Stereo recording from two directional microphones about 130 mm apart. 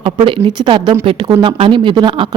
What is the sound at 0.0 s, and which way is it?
A woman's voice, 40° right (ahead or behind).